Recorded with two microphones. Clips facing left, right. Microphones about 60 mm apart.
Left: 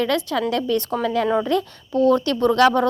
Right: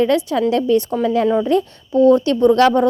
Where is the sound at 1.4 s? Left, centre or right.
Right.